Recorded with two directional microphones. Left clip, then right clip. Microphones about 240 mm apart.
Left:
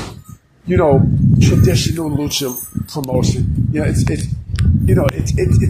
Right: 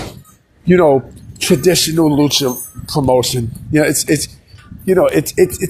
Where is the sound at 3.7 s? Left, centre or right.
Right.